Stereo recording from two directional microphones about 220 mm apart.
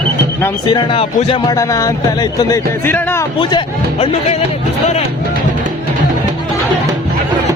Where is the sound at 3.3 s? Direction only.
25° left (ahead or behind).